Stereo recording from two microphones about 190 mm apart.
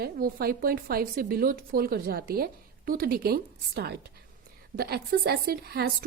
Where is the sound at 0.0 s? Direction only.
50° right (ahead or behind).